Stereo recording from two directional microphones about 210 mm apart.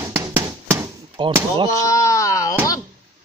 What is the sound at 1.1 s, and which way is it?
Speech, 25° right (ahead or behind).